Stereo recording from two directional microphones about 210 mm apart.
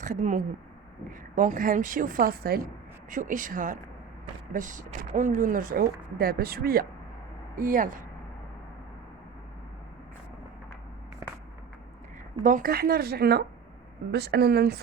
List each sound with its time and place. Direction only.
0.0 s speech: 35° right (ahead or behind)
12.4 s speech: 40° right (ahead or behind)